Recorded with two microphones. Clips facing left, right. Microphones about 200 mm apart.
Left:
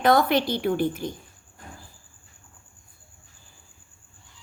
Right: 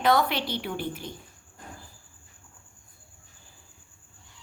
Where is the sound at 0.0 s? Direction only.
45° left (ahead or behind).